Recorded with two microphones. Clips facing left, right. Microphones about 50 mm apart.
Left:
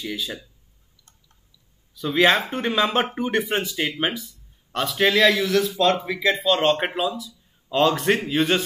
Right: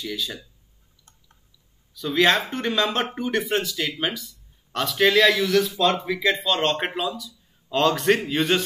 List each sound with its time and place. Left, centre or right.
0.0 s speech: centre
2.0 s speech: centre
4.7 s speech: centre